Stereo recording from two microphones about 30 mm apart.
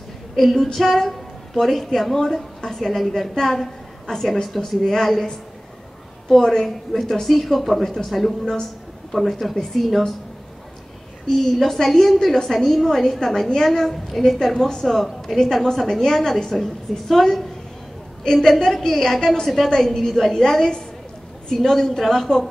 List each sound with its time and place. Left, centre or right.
0.4 s a woman's voice: centre
6.2 s a woman's voice: centre
11.2 s a woman's voice: centre
13.2 s a woman's voice: centre
13.8 s a woman's voice: centre
21.5 s a woman's voice: centre